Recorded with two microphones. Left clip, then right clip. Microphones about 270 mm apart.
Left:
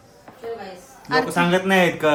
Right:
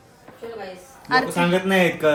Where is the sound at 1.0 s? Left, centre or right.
Centre.